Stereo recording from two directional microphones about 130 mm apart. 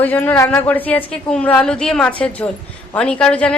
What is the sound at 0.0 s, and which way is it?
A woman's voice, 15° left (ahead or behind).